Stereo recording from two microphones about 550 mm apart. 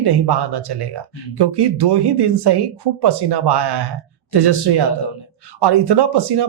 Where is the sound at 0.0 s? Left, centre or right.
Right.